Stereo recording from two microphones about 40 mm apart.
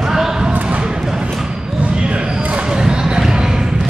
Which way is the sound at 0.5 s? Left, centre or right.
Right.